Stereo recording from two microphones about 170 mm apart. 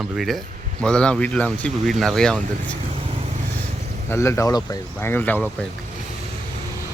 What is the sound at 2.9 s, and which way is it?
Vehicle, 35° right (ahead or behind).